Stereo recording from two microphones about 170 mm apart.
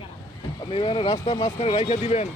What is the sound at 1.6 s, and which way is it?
Speech, 40° left (ahead or behind).